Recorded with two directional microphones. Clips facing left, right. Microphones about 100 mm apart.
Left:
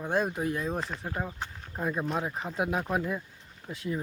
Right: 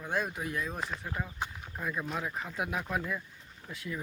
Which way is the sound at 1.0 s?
35° left (ahead or behind).